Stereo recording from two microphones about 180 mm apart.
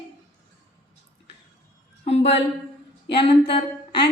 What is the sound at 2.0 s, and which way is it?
A woman's voice, 35° left (ahead or behind).